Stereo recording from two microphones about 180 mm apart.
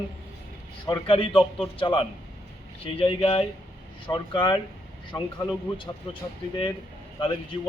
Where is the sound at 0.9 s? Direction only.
30° left (ahead or behind).